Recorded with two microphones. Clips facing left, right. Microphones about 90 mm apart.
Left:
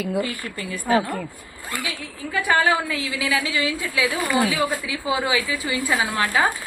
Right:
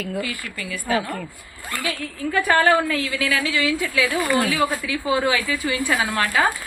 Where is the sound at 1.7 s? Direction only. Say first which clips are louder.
Right 3 dB; 15° left (ahead or behind).